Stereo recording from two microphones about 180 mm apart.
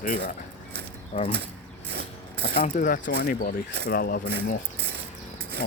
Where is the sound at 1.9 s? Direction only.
65° right (ahead or behind).